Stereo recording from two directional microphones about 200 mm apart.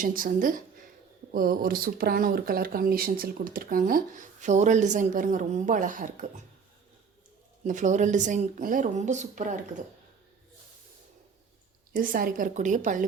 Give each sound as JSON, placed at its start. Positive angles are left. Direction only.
{"t": 0.0, "sound": "speech", "side_deg": -45}
{"t": 7.6, "sound": "speech", "side_deg": -40}
{"t": 11.9, "sound": "speech", "side_deg": -45}